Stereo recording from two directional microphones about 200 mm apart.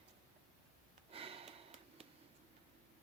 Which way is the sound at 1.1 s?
30° right (ahead or behind).